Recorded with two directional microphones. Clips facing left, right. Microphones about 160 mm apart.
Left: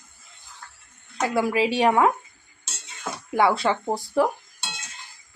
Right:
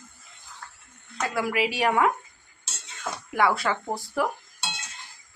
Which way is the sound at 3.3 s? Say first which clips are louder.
Left 3 dB; 25° left (ahead or behind).